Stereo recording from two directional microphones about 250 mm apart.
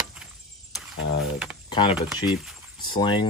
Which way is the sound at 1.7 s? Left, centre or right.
Centre.